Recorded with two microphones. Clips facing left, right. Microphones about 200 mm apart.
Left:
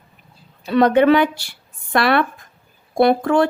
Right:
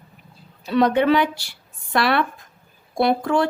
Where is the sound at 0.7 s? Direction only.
55° left (ahead or behind).